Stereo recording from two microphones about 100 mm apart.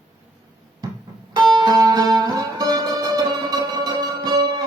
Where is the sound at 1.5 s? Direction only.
45° right (ahead or behind).